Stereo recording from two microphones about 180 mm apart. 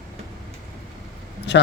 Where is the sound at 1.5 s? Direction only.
75° left (ahead or behind).